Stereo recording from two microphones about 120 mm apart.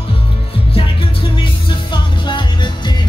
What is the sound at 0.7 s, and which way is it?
Music, 50° left (ahead or behind).